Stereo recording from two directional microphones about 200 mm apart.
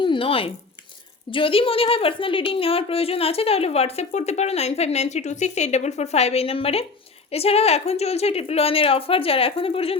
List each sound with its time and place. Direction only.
0.0 s a woman's voice: 25° left (ahead or behind)